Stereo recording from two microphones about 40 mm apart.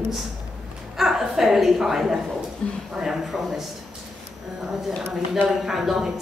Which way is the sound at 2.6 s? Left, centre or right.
Left.